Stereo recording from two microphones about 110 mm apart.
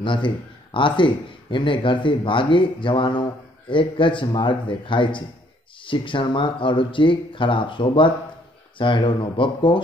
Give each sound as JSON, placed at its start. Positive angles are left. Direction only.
{"t": 0.0, "sound": "speech", "side_deg": 50}